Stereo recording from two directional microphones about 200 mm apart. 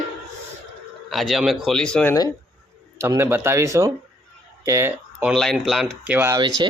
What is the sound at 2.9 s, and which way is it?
A man's voice, 15° right (ahead or behind).